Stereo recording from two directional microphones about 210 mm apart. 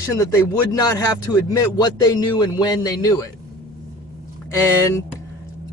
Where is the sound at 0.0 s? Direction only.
15° left (ahead or behind).